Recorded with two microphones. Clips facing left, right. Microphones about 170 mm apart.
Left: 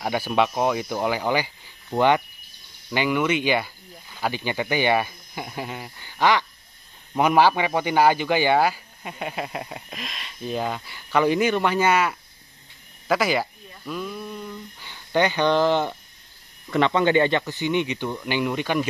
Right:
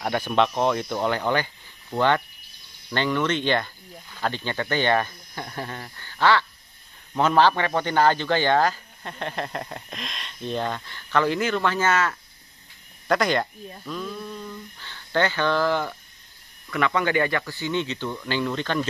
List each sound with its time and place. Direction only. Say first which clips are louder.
0.0 s speech: even; 5° left (ahead or behind)